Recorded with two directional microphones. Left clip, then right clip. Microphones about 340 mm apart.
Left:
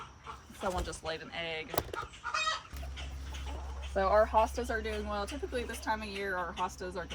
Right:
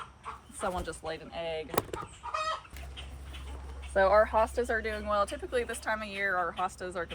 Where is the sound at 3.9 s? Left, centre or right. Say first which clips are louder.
Right 3 dB; right.